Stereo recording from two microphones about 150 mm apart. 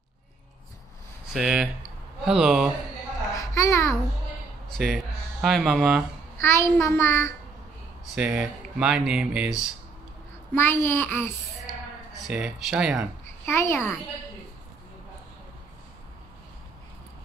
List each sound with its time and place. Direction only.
1.3 s speech: 5° right (ahead or behind)
3.3 s a child's voice: 20° left (ahead or behind)
4.7 s speech: centre (ahead or behind)
6.4 s child singing: 15° left (ahead or behind)
8.1 s speech: 5° right (ahead or behind)
10.5 s child singing: 15° left (ahead or behind)
12.2 s speech: 5° right (ahead or behind)
13.5 s child singing: 15° left (ahead or behind)